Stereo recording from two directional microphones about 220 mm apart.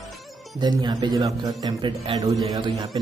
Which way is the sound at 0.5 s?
20° right (ahead or behind).